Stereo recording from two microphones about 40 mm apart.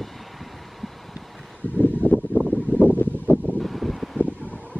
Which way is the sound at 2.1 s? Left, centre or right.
Right.